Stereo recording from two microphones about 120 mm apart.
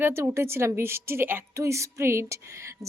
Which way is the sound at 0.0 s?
20° right (ahead or behind).